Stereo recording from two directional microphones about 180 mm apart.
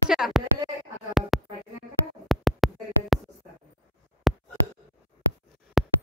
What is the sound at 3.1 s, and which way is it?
Music, centre (ahead or behind).